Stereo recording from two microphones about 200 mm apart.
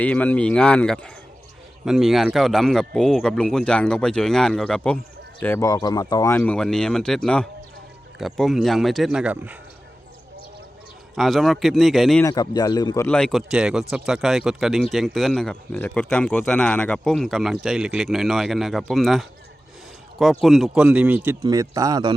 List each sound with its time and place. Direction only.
0.0 s speech: 5° left (ahead or behind)
11.1 s speech: centre (ahead or behind)
12.2 s a man's voice: 20° left (ahead or behind)
13.1 s speech: 5° left (ahead or behind)
20.4 s speech: centre (ahead or behind)
21.2 s speech: 15° right (ahead or behind)